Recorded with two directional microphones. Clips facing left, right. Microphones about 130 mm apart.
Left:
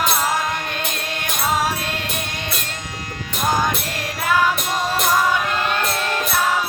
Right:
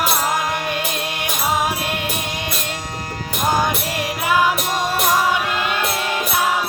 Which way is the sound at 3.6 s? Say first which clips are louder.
Right 2 dB; 15° right (ahead or behind).